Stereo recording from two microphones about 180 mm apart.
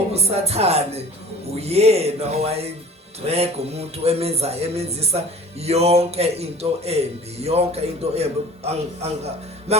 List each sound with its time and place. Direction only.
0.1 s speech: 35° right (ahead or behind)